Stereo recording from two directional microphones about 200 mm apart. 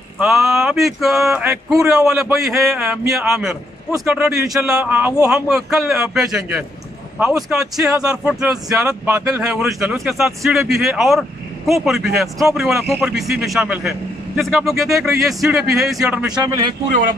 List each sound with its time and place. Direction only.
0.2 s a man's voice: centre (ahead or behind)
16.3 s a man's voice: 20° right (ahead or behind)